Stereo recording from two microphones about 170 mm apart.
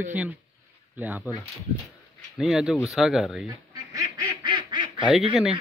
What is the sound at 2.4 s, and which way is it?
Speech, 5° right (ahead or behind).